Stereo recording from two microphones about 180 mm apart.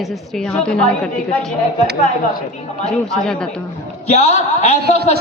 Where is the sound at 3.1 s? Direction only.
5° left (ahead or behind).